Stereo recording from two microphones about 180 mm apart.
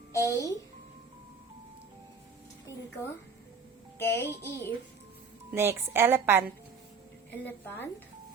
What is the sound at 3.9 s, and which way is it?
Speech, 15° left (ahead or behind).